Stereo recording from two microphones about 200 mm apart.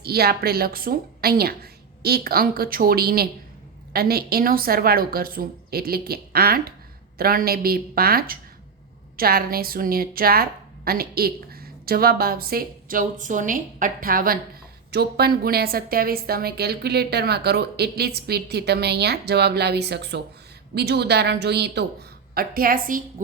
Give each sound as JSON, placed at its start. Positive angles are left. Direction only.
{"t": 0.0, "sound": "a woman's voice", "side_deg": -50}